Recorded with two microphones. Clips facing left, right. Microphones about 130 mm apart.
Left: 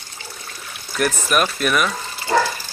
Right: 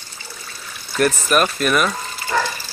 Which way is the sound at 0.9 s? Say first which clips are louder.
Right 2 dB; 5° left (ahead or behind).